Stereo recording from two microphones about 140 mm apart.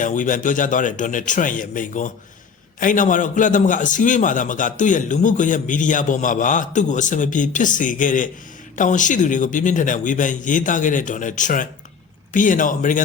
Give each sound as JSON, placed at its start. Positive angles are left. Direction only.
{"t": 0.0, "sound": "a man's voice", "side_deg": 65}